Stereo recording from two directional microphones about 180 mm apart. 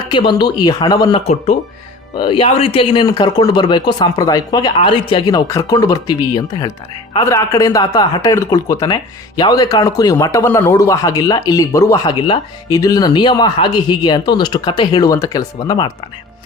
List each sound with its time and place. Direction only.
0.1 s speech: 25° left (ahead or behind)